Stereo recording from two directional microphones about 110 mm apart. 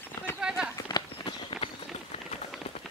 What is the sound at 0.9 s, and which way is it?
Clip-clop, 45° left (ahead or behind).